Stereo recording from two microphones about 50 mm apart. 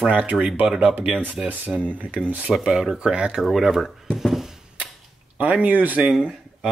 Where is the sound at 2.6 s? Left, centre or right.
Centre.